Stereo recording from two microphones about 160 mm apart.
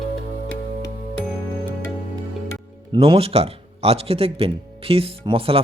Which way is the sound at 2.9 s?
35° right (ahead or behind).